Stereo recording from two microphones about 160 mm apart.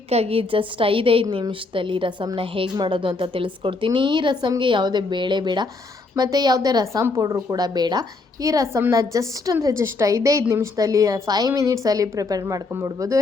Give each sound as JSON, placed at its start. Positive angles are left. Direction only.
{"t": 0.1, "sound": "a woman's voice", "side_deg": -40}